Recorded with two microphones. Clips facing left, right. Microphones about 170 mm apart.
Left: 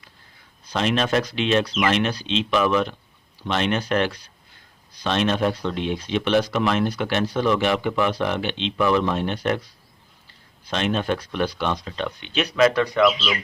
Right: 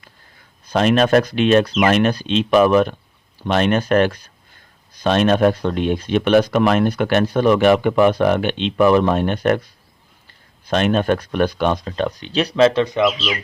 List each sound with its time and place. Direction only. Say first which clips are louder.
0.7 s speech: right 7 dB; 50° right (ahead or behind)
10.7 s speech: right 6 dB; 50° right (ahead or behind); by 13.1 s 20° right (ahead or behind)